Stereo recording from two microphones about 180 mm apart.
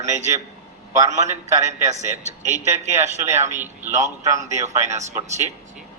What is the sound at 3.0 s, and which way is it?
Speech, 15° right (ahead or behind).